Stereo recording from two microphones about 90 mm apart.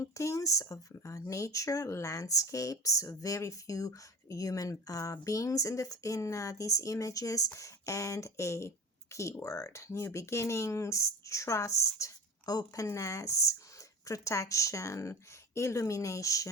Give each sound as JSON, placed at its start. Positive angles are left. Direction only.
{"t": 0.0, "sound": "speech", "side_deg": 35}